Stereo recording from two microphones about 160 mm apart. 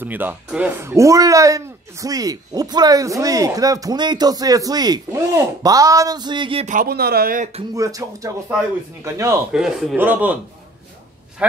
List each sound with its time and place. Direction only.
0.0 s a man's voice: 10° right (ahead or behind); by 6.6 s 30° right (ahead or behind)
6.6 s speech: 55° right (ahead or behind)
7.7 s a man's voice: 20° right (ahead or behind)
9.5 s a man's voice: 5° right (ahead or behind)